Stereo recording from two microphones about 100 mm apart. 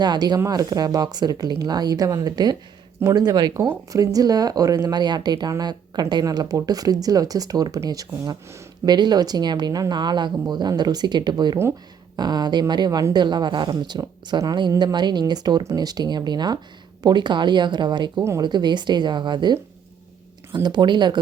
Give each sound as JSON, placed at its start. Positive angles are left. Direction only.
{"t": 0.0, "sound": "speech", "side_deg": -45}
{"t": 3.5, "sound": "speech", "side_deg": -30}
{"t": 18.2, "sound": "speech", "side_deg": -30}
{"t": 18.4, "sound": "speech", "side_deg": -50}